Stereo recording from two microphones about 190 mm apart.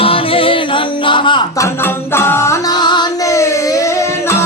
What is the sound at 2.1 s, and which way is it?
Music, 15° left (ahead or behind).